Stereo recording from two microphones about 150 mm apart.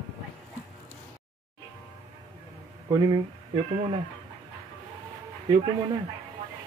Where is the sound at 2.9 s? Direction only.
30° right (ahead or behind).